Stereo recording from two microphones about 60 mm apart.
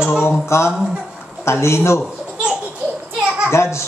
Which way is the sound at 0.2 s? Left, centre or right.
Left.